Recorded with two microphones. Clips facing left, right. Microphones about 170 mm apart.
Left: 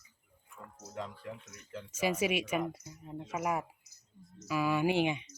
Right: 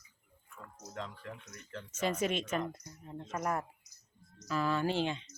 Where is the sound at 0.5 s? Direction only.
10° left (ahead or behind).